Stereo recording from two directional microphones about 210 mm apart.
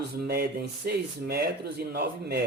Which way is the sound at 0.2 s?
50° right (ahead or behind).